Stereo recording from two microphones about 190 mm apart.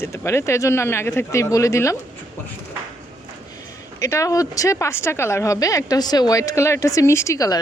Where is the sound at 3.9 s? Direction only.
15° left (ahead or behind).